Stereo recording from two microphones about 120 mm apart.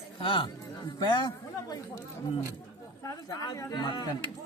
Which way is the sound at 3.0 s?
30° left (ahead or behind).